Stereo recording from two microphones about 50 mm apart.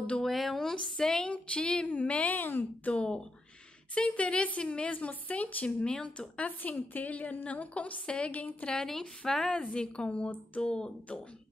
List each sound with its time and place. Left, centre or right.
0.2 s a woman's voice: centre; by 2.4 s left
2.4 s speech: left
2.9 s a woman's voice: left
5.9 s a woman's voice: centre
8.7 s a woman's voice: centre